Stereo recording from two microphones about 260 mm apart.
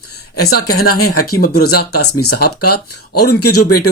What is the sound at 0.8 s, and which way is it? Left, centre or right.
Speech, left.